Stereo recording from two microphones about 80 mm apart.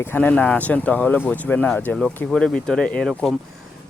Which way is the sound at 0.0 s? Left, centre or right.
Left.